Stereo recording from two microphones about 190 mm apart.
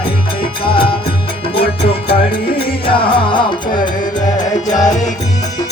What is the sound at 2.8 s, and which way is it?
Music, 25° left (ahead or behind).